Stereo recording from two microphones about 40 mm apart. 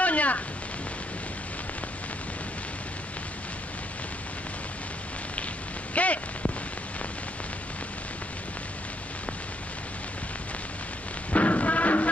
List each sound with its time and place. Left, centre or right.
0.0 s rain: left
5.9 s a sound: left
11.3 s music: left